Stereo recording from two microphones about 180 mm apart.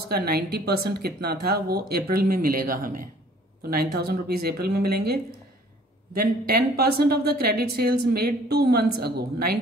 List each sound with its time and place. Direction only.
0.1 s speech: 60° right (ahead or behind)